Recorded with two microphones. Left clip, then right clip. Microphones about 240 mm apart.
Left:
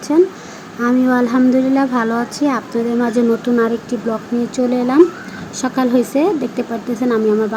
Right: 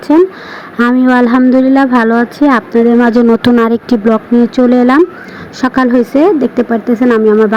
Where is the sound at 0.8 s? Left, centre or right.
Right.